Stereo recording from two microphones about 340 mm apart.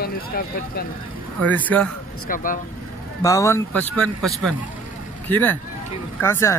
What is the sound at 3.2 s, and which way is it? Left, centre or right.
Speech, centre.